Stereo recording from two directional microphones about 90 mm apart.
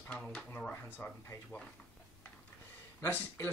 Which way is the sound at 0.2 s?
10° left (ahead or behind).